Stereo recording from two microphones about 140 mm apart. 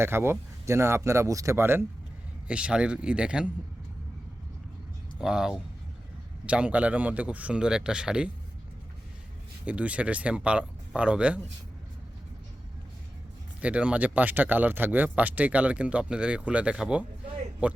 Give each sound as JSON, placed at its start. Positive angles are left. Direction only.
{"t": 0.0, "sound": "speech", "side_deg": -15}
{"t": 5.2, "sound": "speech", "side_deg": -5}
{"t": 9.6, "sound": "speech", "side_deg": -10}
{"t": 13.6, "sound": "speech", "side_deg": -10}